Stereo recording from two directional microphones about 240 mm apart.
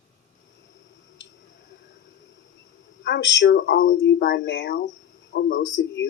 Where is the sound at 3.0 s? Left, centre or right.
Left.